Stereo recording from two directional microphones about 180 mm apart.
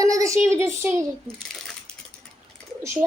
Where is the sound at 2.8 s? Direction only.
15° right (ahead or behind).